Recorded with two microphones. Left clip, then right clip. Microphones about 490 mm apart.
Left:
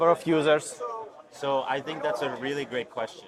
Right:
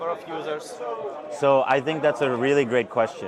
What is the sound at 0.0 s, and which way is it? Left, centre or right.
Speech, left.